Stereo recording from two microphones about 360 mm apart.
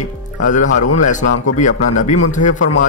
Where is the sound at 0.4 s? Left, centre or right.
Left.